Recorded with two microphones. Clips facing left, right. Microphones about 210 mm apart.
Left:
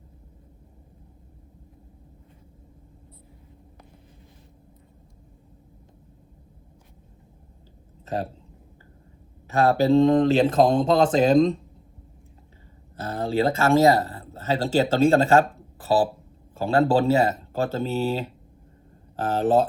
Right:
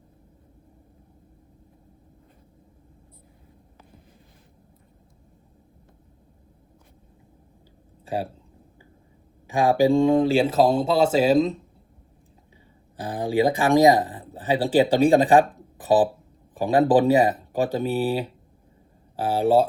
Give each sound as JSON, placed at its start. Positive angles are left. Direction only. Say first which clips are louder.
{"t": 8.0, "sound": "speech", "louder": "right 1 dB", "side_deg": -10}
{"t": 9.5, "sound": "speech", "louder": "even", "side_deg": -15}
{"t": 13.0, "sound": "speech", "louder": "right 2 dB", "side_deg": -15}